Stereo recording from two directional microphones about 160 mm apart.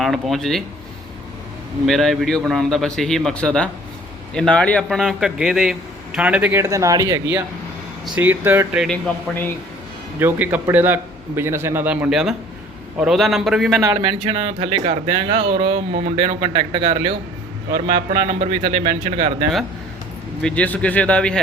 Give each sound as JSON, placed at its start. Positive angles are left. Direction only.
{"t": 0.0, "sound": "speech", "side_deg": 0}
{"t": 1.9, "sound": "speech", "side_deg": 0}
{"t": 8.0, "sound": "a man's voice", "side_deg": -10}
{"t": 10.2, "sound": "a man's voice", "side_deg": -10}
{"t": 14.1, "sound": "speech", "side_deg": -35}
{"t": 20.4, "sound": "speech", "side_deg": 10}